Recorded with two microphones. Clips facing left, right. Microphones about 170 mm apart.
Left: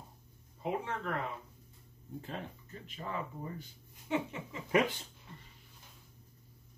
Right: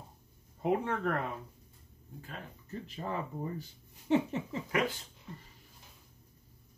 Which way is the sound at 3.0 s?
35° right (ahead or behind).